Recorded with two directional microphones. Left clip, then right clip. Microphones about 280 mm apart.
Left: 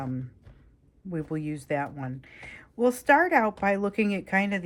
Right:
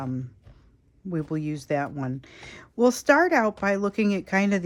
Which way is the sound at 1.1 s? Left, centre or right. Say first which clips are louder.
Right 3 dB; centre.